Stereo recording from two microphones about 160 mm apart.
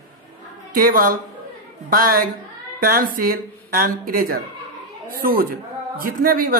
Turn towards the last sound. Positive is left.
turn(degrees=-60)  # may be behind; listen again after turning